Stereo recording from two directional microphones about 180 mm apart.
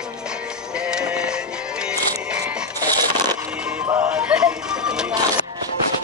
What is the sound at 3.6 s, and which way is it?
Music, 10° right (ahead or behind).